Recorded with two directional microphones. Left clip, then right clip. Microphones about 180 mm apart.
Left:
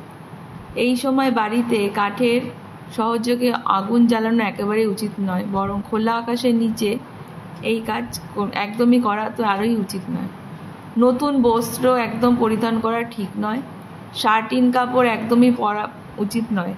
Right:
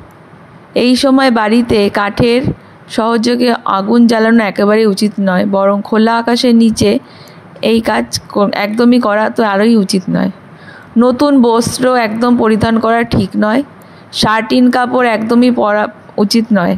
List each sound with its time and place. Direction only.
0.7 s speech: 50° right (ahead or behind)